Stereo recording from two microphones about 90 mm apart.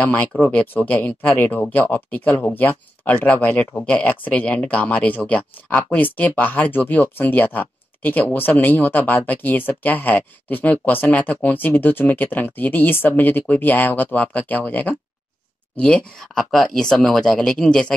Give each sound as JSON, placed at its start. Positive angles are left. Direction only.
{"t": 0.0, "sound": "speech", "side_deg": 15}